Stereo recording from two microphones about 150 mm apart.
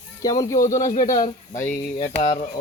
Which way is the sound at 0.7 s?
55° left (ahead or behind).